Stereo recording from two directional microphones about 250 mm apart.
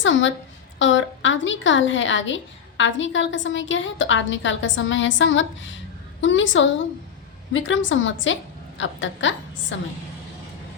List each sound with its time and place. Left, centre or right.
0.0 s a woman's voice: left